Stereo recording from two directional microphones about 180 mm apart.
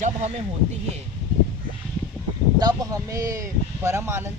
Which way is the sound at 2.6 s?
20° right (ahead or behind).